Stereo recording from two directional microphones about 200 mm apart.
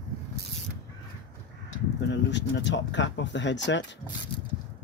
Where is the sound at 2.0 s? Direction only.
60° left (ahead or behind).